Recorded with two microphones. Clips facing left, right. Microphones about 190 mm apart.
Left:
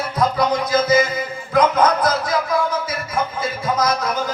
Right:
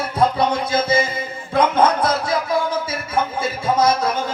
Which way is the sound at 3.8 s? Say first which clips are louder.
Right 3 dB; 30° right (ahead or behind).